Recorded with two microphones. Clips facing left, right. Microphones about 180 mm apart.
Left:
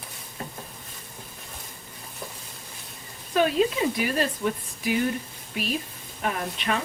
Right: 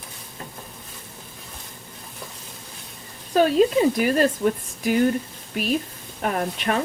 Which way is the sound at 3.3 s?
40° right (ahead or behind).